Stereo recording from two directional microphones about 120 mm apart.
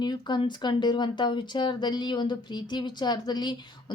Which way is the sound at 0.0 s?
40° left (ahead or behind).